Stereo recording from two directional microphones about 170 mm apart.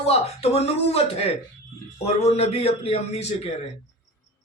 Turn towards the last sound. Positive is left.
turn(degrees=40)  # may be behind; listen again after turning